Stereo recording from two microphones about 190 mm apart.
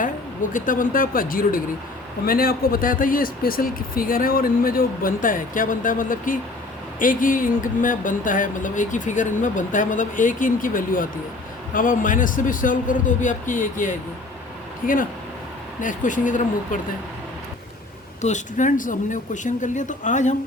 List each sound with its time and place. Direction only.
0.5 s speech: 45° left (ahead or behind)
18.2 s speech: 40° left (ahead or behind)